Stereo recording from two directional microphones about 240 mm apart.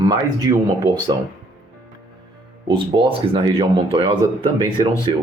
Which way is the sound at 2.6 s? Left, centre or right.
Centre.